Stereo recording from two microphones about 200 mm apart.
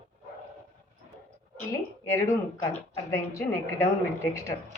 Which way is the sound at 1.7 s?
15° left (ahead or behind).